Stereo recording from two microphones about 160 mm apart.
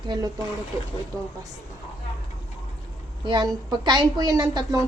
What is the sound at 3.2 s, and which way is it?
A woman's voice, 25° right (ahead or behind).